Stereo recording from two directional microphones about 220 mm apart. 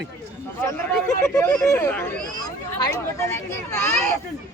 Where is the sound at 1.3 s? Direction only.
10° left (ahead or behind).